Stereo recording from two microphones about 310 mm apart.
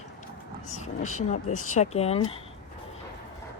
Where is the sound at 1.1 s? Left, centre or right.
Left.